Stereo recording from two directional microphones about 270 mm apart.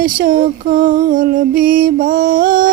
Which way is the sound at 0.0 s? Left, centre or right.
Right.